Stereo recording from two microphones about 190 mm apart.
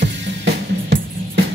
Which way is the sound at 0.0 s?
60° right (ahead or behind).